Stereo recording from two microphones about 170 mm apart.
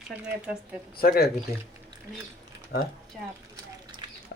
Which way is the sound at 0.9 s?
65° left (ahead or behind).